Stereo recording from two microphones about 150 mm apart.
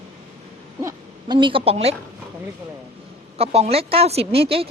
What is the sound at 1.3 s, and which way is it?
Speech, 35° right (ahead or behind).